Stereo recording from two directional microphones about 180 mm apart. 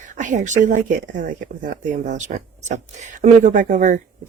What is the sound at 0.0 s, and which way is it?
Speech, 45° right (ahead or behind).